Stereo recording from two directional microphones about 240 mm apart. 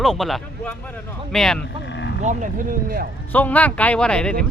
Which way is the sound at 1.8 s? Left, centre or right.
Left.